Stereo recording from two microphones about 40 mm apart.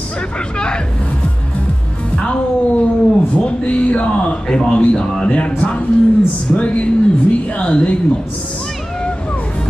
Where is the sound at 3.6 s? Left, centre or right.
Left.